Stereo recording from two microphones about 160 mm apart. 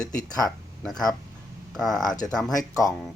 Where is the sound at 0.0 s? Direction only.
5° left (ahead or behind).